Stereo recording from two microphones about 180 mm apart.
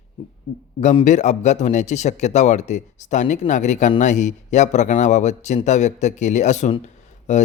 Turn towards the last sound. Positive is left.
turn(degrees=40)  # may be behind; listen again after turning